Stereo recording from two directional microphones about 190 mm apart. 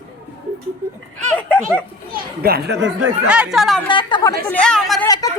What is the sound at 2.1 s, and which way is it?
Speech, 55° right (ahead or behind).